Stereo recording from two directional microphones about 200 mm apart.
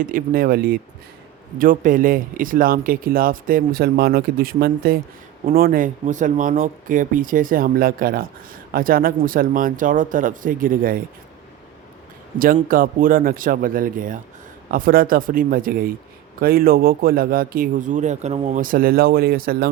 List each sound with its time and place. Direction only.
0.0 s speech: 45° right (ahead or behind)
12.4 s speech: 45° right (ahead or behind)
18.6 s speech: 45° right (ahead or behind)